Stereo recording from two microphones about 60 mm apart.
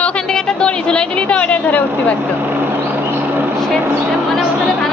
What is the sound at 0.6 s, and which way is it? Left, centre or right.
A woman's voice, centre.